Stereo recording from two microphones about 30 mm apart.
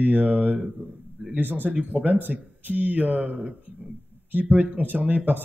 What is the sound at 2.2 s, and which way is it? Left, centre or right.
Speech, right.